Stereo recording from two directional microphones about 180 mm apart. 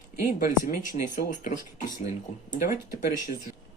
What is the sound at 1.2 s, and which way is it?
Speech, 55° left (ahead or behind).